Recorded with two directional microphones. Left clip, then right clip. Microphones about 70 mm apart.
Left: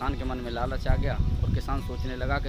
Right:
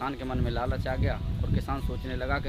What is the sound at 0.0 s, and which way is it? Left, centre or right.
Speech, centre.